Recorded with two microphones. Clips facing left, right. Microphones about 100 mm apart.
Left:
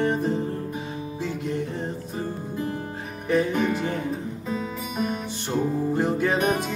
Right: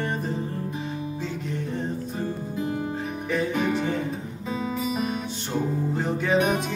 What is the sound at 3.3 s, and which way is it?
Music, 5° left (ahead or behind).